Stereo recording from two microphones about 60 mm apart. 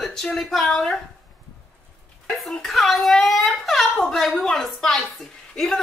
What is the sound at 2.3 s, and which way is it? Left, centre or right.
Speech, centre.